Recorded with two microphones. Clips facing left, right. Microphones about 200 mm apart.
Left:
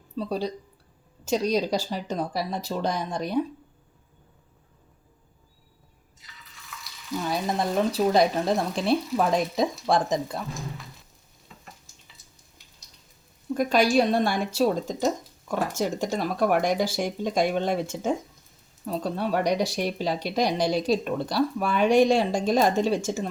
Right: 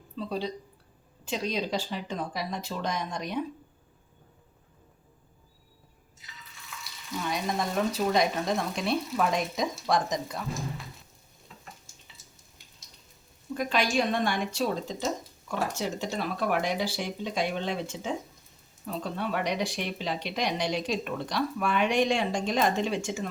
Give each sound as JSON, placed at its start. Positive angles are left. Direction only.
{"t": 0.2, "sound": "speech", "side_deg": 40}
{"t": 7.3, "sound": "speech", "side_deg": 35}
{"t": 13.5, "sound": "speech", "side_deg": 45}